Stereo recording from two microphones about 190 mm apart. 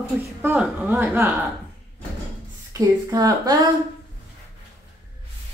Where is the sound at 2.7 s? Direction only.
15° right (ahead or behind).